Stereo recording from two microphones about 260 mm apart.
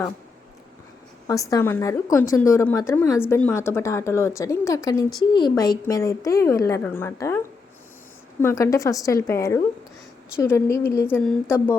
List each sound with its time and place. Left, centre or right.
1.3 s a woman's voice: centre